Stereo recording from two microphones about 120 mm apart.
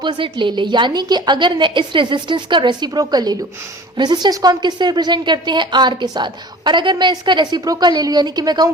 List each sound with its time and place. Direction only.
0.0 s a woman's voice: 40° right (ahead or behind)